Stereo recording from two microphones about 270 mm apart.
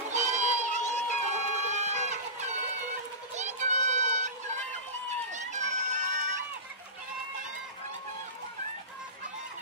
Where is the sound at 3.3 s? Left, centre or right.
Right.